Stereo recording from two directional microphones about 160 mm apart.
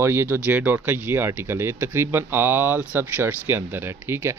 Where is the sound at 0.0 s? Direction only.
15° right (ahead or behind).